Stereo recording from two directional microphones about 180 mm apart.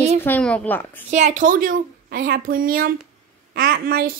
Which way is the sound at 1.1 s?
40° right (ahead or behind).